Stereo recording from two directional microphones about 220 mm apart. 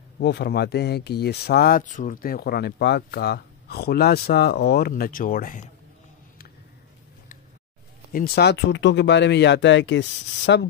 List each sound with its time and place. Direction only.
0.2 s speech: 50° left (ahead or behind)
8.1 s speech: 45° left (ahead or behind)